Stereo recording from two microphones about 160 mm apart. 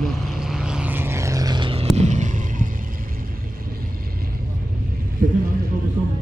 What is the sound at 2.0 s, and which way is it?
Fireworks, 50° right (ahead or behind).